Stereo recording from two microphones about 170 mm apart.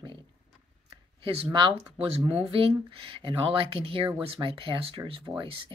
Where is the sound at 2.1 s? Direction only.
35° right (ahead or behind).